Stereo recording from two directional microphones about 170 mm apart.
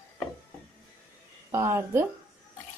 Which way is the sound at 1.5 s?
15° right (ahead or behind).